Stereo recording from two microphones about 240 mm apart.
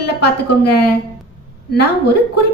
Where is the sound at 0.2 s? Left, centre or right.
Left.